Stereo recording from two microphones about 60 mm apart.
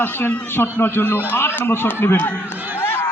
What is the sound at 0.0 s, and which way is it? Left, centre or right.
A man's voice, left.